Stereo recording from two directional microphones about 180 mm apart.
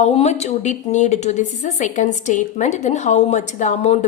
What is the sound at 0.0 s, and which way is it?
A woman's voice, 35° left (ahead or behind).